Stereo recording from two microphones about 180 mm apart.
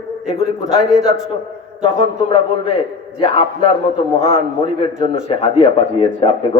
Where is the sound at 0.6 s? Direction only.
Centre (ahead or behind).